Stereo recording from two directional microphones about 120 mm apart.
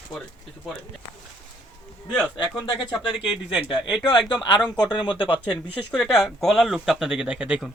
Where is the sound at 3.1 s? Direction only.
5° right (ahead or behind).